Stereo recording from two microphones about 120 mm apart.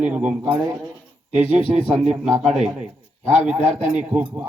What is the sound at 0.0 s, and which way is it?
A man's voice, 10° right (ahead or behind).